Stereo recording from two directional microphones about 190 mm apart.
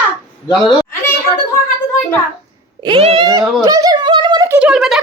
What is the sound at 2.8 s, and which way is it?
Speech, 30° right (ahead or behind).